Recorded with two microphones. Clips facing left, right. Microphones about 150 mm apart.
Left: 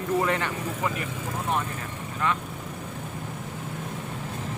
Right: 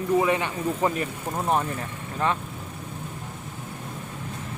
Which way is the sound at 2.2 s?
30° right (ahead or behind).